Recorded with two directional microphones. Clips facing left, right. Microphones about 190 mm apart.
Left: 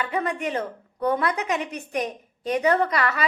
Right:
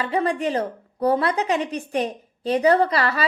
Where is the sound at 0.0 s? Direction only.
30° right (ahead or behind).